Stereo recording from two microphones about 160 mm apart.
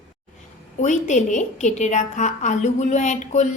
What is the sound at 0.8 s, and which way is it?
A woman's voice, 50° left (ahead or behind).